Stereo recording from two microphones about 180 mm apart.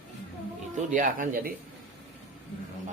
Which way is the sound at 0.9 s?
50° right (ahead or behind).